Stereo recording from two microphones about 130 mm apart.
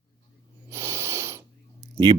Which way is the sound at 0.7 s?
20° right (ahead or behind).